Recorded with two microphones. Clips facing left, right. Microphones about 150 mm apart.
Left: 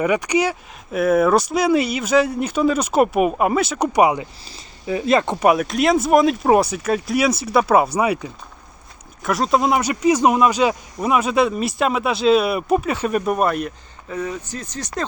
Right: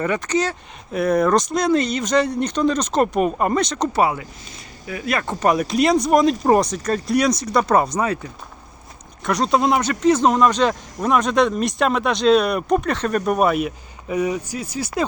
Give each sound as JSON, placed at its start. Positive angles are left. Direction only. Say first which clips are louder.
{"t": 0.0, "sound": "speech", "louder": "left 3 dB", "side_deg": 10}
{"t": 4.4, "sound": "speech", "louder": "left 7 dB", "side_deg": 30}
{"t": 5.4, "sound": "speech", "louder": "left 1 dB", "side_deg": 5}
{"t": 9.2, "sound": "speech", "louder": "even", "side_deg": 0}